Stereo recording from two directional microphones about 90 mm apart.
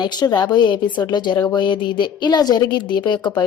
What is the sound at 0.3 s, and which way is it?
Speech, 55° left (ahead or behind).